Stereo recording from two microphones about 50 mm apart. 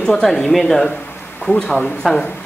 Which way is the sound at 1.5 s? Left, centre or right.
Left.